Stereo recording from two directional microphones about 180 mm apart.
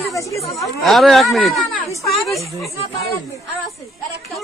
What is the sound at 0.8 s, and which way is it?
Speech, centre (ahead or behind).